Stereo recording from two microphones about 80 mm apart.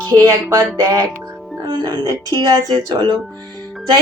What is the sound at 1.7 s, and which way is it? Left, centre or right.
Speech, right.